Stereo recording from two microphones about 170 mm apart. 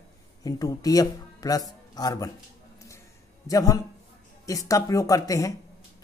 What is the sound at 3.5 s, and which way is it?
A woman's voice, 20° left (ahead or behind).